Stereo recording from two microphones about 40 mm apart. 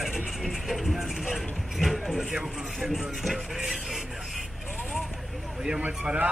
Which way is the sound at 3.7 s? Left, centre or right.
Centre.